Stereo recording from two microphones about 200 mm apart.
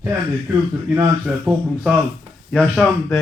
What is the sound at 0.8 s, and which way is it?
A man's voice, 5° right (ahead or behind).